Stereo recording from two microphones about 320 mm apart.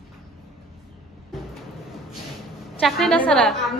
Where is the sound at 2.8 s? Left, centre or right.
Centre.